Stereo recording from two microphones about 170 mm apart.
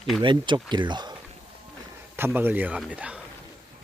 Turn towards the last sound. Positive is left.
turn(degrees=-5)  # may be behind; listen again after turning